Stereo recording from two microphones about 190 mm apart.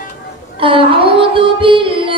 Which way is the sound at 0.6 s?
25° right (ahead or behind).